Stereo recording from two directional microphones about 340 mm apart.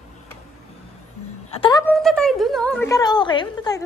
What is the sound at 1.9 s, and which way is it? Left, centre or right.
A woman's voice, centre.